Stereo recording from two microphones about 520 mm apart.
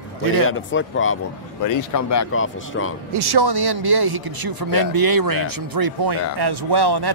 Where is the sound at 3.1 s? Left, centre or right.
Right.